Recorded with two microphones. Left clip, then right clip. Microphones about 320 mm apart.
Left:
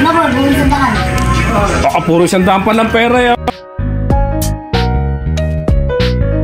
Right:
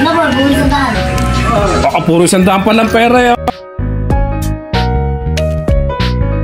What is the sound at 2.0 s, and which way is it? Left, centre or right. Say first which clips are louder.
Speech: right 1 dB; centre.